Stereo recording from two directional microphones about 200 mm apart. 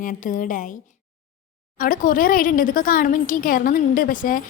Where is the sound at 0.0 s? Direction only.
40° left (ahead or behind).